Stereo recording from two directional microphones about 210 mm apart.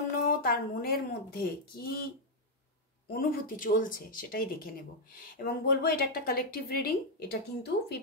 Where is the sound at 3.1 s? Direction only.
40° left (ahead or behind).